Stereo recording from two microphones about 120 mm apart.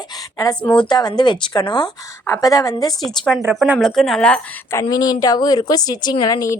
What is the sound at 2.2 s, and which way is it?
Speech, 25° left (ahead or behind).